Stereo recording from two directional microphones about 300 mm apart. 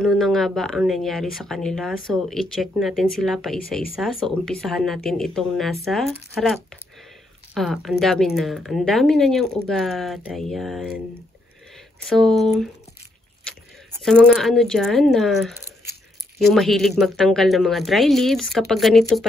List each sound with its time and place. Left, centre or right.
0.0 s speech: centre
12.1 s speech: centre